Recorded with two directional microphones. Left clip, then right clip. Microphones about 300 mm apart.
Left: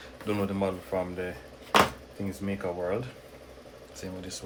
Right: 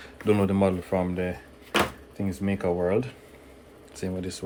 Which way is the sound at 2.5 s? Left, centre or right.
Right.